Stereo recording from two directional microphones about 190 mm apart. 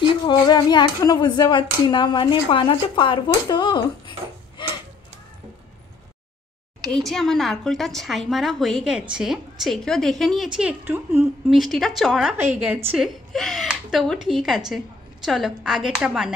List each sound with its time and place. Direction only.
0.3 s speech: 20° left (ahead or behind)
4.6 s a sound: 25° left (ahead or behind)
6.9 s a woman's voice: centre (ahead or behind)